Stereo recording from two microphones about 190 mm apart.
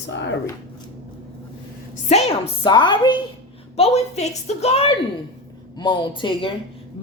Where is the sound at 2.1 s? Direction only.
35° left (ahead or behind).